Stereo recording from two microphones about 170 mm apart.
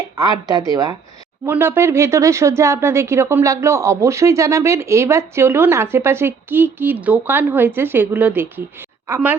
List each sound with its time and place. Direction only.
0.2 s a woman's voice: 20° right (ahead or behind)